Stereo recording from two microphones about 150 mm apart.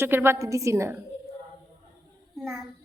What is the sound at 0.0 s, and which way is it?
A woman's voice, 15° right (ahead or behind).